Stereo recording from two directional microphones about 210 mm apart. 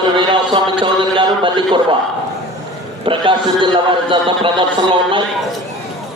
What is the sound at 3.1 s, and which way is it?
A man's voice, 25° right (ahead or behind).